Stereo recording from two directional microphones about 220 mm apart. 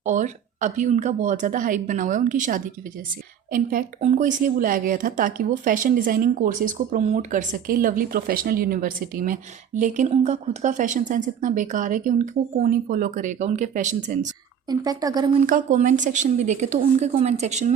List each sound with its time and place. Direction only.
0.0 s speech: 35° right (ahead or behind)
14.7 s a woman's voice: 15° right (ahead or behind)
15.4 s speech: 35° right (ahead or behind)